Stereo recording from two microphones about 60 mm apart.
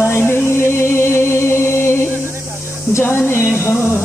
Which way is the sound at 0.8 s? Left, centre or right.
Left.